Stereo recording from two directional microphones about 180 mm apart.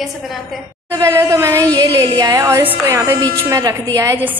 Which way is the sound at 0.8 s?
15° right (ahead or behind).